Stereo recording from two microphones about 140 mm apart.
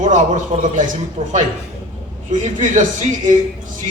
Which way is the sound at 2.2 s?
60° right (ahead or behind).